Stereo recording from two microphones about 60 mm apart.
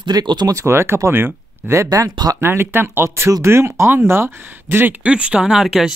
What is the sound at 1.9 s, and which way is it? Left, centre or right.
Speech, right.